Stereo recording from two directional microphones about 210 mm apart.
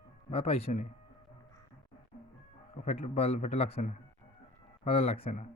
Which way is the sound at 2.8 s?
30° left (ahead or behind).